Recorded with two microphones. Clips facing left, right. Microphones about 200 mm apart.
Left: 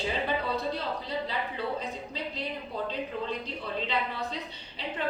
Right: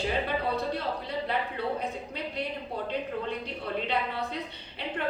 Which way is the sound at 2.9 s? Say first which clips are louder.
Right 2 dB; 60° right (ahead or behind).